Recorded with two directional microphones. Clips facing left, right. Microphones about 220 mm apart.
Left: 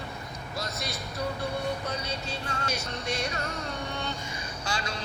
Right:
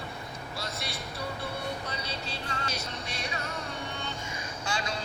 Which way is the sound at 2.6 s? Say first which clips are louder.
Left 4 dB; 45° left (ahead or behind).